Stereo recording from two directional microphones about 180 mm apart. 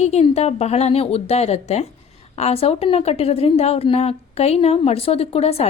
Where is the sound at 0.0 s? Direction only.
35° left (ahead or behind).